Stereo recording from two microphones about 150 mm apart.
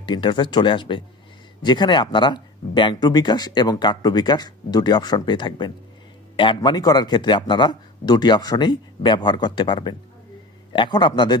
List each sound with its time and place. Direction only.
0.0 s speech: 30° left (ahead or behind)